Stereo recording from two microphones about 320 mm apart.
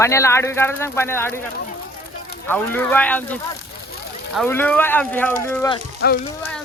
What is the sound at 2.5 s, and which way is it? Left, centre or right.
Speech, centre.